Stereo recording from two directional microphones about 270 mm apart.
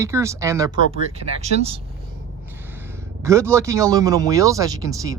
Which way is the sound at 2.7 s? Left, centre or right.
Centre.